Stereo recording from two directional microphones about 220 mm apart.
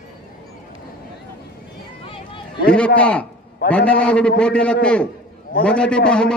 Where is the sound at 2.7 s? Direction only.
5° left (ahead or behind).